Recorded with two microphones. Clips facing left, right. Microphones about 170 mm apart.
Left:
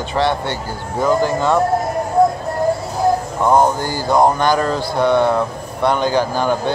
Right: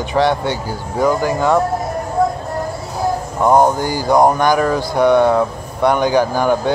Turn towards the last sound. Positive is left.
turn(degrees=-15)  # may be behind; listen again after turning